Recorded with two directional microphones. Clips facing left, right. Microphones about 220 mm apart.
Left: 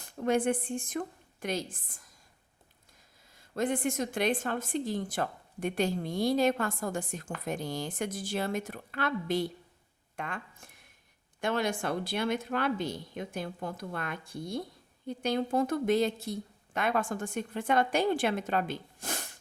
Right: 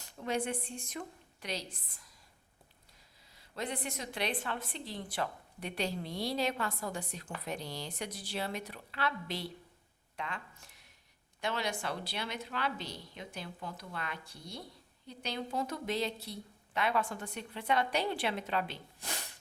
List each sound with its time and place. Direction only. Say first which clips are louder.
0.0 s a woman's voice: left 7 dB; 50° left (ahead or behind)
3.3 s a woman's voice: left 8 dB; 50° left (ahead or behind)